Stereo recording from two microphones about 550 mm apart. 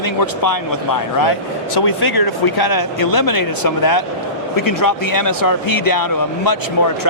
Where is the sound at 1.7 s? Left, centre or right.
Left.